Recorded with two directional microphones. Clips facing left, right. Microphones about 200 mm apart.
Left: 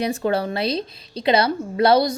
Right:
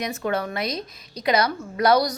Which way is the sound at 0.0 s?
30° left (ahead or behind).